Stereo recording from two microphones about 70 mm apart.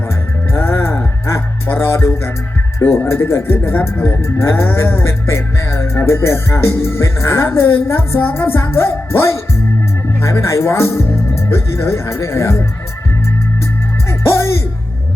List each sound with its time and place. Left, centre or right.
0.5 s music: left
10.2 s speech: left
11.4 s music: left
14.3 s music: left